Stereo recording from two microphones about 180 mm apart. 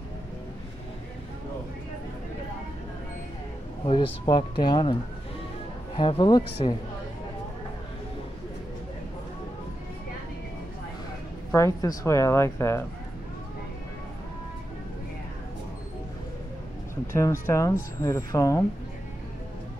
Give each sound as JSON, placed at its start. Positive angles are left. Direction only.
{"t": 3.8, "sound": "speech", "side_deg": 30}
{"t": 5.9, "sound": "speech", "side_deg": 25}
{"t": 11.5, "sound": "speech", "side_deg": 15}
{"t": 17.1, "sound": "speech", "side_deg": 15}